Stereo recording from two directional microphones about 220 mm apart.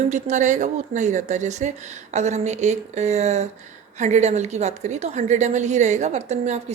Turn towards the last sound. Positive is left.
turn(degrees=-30)  # may be behind; listen again after turning